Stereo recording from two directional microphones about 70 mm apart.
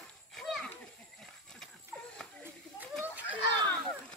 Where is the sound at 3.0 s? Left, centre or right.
Right.